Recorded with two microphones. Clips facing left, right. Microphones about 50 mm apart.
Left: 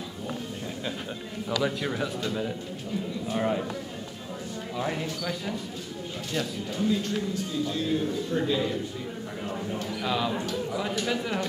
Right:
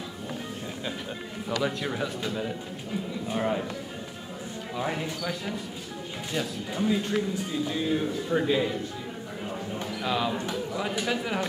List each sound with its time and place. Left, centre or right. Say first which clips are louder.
1.6 s a man's voice: left 1 dB; centre
4.7 s a man's voice: even; centre
6.3 s speech: even; centre
10.0 s speech: right 1 dB; centre